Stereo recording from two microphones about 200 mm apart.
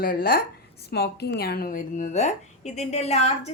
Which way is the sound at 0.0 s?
50° left (ahead or behind).